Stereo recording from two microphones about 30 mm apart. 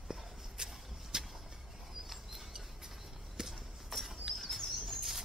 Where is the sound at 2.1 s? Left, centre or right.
Centre.